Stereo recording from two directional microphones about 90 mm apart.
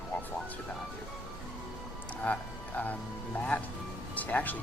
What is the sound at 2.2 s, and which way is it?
Speech, 15° left (ahead or behind).